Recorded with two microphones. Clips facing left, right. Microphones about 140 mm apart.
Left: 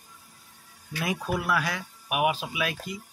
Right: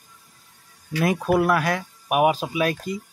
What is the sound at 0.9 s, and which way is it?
Speech, 60° right (ahead or behind).